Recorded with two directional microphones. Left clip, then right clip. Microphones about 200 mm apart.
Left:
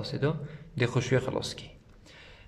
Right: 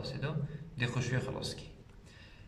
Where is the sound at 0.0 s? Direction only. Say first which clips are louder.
Left 9 dB; 35° left (ahead or behind).